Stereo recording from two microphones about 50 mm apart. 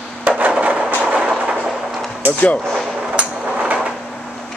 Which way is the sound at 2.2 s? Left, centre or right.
Right.